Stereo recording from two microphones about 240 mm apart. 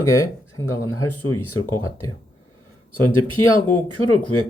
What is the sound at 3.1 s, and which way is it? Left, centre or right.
Speech, left.